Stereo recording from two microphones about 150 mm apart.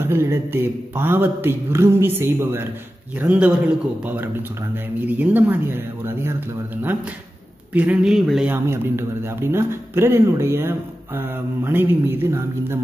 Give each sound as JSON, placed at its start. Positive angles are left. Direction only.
{"t": 0.0, "sound": "speech", "side_deg": -15}
{"t": 7.7, "sound": "a man's voice", "side_deg": -10}
{"t": 8.5, "sound": "speech", "side_deg": -15}